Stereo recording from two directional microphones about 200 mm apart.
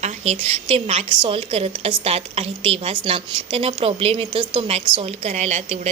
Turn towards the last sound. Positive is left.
turn(degrees=-35)  # may be behind; listen again after turning